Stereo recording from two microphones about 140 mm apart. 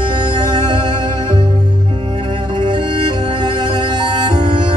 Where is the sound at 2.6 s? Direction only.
35° right (ahead or behind).